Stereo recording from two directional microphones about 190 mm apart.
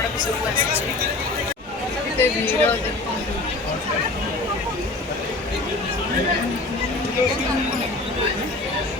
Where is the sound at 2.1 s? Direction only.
10° left (ahead or behind).